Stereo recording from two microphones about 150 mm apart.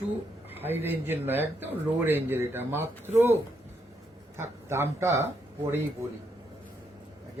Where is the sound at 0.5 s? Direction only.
15° right (ahead or behind).